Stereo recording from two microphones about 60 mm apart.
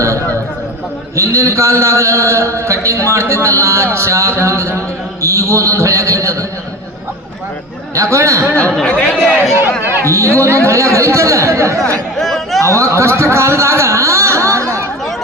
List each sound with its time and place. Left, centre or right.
0.0 s a sound: right
1.1 s a man's voice: right
7.9 s a man's voice: right
8.8 s speech: centre
10.3 s a man's voice: right
12.2 s chatter: centre
12.6 s a sound: right